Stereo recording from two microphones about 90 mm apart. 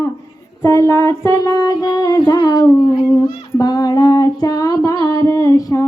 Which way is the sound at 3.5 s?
45° left (ahead or behind).